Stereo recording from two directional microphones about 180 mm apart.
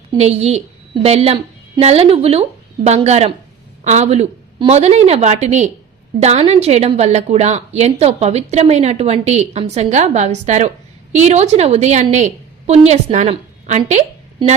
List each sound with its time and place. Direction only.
0.2 s a woman's voice: 35° right (ahead or behind)